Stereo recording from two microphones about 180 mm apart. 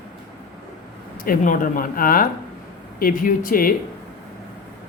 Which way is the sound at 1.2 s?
50° left (ahead or behind).